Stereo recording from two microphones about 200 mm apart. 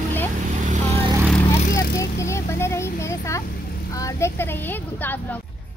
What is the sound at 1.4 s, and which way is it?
Vehicle, 30° left (ahead or behind).